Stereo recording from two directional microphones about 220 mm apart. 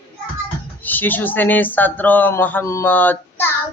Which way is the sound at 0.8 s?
10° left (ahead or behind).